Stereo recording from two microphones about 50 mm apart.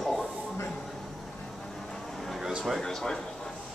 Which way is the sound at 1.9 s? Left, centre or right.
Centre.